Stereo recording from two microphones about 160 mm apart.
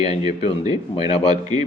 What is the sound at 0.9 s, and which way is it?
Speech, 35° left (ahead or behind).